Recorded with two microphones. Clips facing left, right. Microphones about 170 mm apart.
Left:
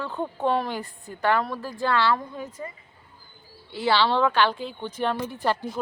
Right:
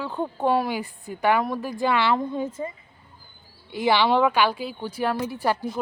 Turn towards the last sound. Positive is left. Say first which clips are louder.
# right 1 dB
turn(degrees=-10)  # may be behind; listen again after turning